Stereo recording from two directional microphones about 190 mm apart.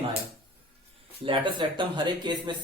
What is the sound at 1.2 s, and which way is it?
Speech, 25° right (ahead or behind).